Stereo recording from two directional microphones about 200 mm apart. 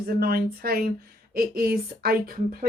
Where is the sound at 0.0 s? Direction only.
50° right (ahead or behind).